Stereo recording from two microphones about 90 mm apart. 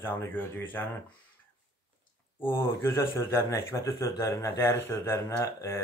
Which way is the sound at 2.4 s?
25° left (ahead or behind).